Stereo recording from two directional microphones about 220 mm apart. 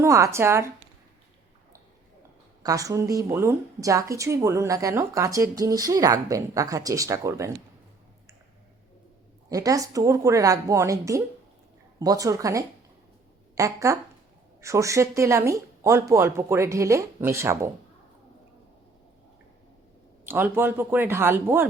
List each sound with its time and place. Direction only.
0.0 s speech: 15° right (ahead or behind)
2.6 s speech: 15° right (ahead or behind)
9.5 s speech: 15° right (ahead or behind)
20.2 s speech: 10° right (ahead or behind)